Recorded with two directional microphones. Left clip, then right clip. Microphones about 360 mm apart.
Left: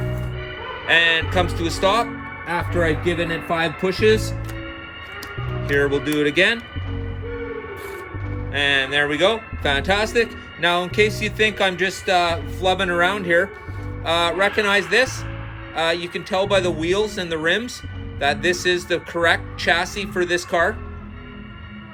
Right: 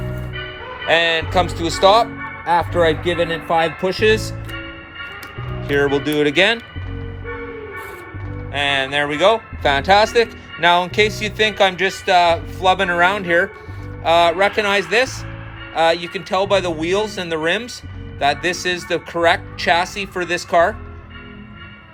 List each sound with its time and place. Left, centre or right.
0.9 s speech: centre
5.6 s speech: centre
8.5 s speech: centre